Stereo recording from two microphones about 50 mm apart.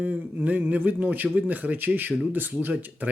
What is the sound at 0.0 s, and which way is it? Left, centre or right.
Speech, right.